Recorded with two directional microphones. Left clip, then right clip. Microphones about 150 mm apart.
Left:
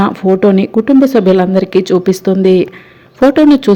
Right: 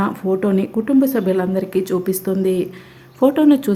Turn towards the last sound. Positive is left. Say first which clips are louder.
# left 7 dB
turn(degrees=30)  # may be behind; listen again after turning